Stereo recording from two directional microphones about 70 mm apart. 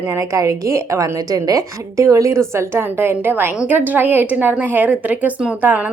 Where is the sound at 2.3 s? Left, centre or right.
Right.